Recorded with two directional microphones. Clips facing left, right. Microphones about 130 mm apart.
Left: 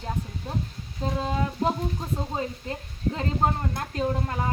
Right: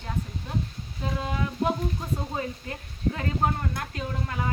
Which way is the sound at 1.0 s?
25° left (ahead or behind).